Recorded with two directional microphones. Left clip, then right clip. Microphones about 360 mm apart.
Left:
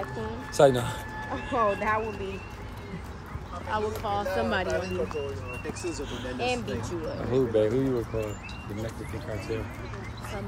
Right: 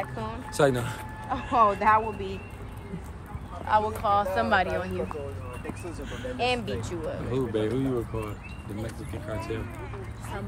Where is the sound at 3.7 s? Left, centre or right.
Right.